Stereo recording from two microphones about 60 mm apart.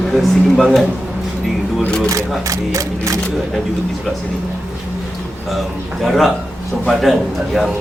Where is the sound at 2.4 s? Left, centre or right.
Right.